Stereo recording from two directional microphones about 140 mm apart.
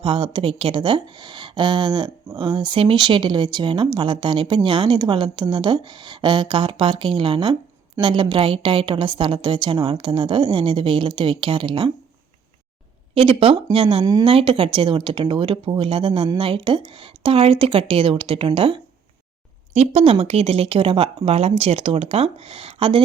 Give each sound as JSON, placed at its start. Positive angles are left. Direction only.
{"t": 0.0, "sound": "speech", "side_deg": -40}
{"t": 13.1, "sound": "speech", "side_deg": -40}
{"t": 14.0, "sound": "speech", "side_deg": -25}
{"t": 14.3, "sound": "speech", "side_deg": -40}
{"t": 19.7, "sound": "speech", "side_deg": -50}